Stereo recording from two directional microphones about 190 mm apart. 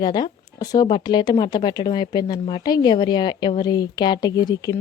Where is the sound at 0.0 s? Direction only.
20° left (ahead or behind).